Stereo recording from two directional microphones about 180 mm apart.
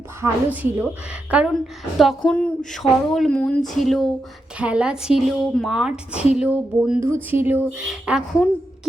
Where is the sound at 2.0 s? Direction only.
5° left (ahead or behind).